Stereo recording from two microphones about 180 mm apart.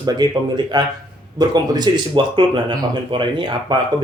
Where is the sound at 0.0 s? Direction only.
25° right (ahead or behind).